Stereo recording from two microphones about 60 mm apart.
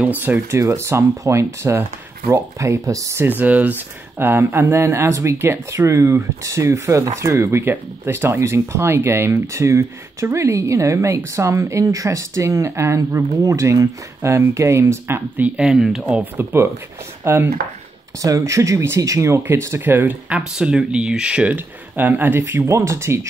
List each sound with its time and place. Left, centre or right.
0.0 s speech: right
0.3 s speech: right
3.2 s speech: right
4.2 s speech: right
5.9 s speech: right
8.4 s speech: right
15.4 s speech: centre
16.0 s speech: right
17.2 s speech: right
18.2 s speech: right
19.4 s speech: right
20.2 s speech: centre
21.5 s speech: right
22.7 s speech: right